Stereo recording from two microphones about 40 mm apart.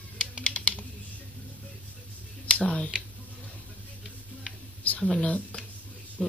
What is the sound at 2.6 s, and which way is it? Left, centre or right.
Tick-tock, left.